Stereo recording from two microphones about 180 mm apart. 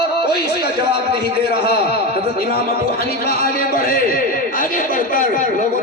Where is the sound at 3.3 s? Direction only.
55° left (ahead or behind).